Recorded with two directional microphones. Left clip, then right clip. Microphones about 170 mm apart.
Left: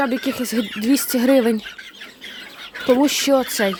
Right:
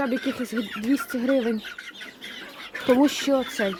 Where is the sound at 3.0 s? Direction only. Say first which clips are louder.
Left 5 dB; 15° left (ahead or behind).